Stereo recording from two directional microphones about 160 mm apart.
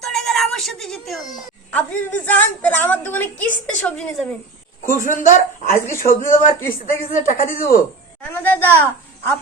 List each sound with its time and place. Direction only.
0.0 s music: centre (ahead or behind)
1.7 s a woman's voice: 10° left (ahead or behind)
4.8 s speech: 55° left (ahead or behind)
8.2 s a woman's voice: 10° left (ahead or behind)